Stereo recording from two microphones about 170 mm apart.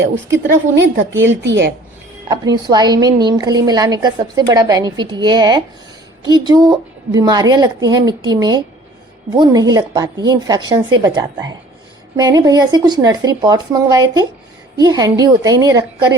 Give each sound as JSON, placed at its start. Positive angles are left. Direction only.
{"t": 0.0, "sound": "a woman's voice", "side_deg": -90}
{"t": 2.3, "sound": "a woman's voice", "side_deg": -20}